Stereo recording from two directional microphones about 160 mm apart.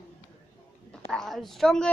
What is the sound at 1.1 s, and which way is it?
Speech, centre (ahead or behind).